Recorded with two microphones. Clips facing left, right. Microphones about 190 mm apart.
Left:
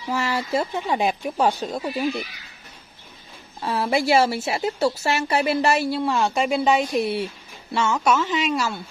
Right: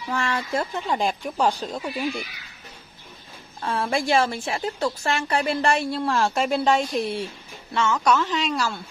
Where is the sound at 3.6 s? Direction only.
5° left (ahead or behind).